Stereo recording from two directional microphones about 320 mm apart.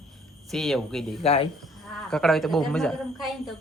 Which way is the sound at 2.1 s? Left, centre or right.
Centre.